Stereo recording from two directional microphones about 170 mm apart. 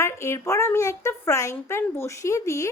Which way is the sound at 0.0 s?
15° left (ahead or behind).